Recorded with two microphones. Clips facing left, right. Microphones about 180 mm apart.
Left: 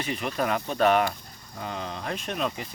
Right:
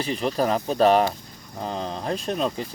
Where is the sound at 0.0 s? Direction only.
35° right (ahead or behind).